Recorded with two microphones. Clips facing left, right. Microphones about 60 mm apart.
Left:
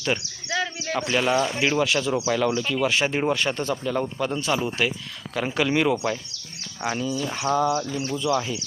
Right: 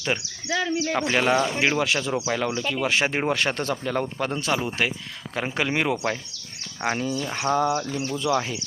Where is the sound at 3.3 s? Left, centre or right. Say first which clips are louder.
Even; right.